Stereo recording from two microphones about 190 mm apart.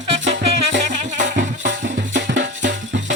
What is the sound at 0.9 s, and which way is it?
Music, 40° right (ahead or behind).